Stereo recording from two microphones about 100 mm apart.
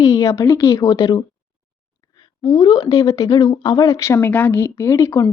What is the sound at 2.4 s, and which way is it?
Speech, 55° left (ahead or behind).